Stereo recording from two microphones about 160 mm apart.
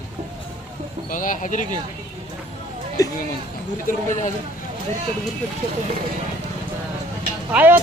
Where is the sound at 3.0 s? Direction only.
20° left (ahead or behind).